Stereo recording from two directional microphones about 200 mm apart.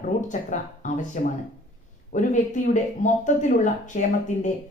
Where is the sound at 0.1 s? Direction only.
40° left (ahead or behind).